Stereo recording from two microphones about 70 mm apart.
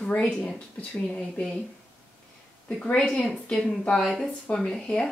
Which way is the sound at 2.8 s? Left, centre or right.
Centre.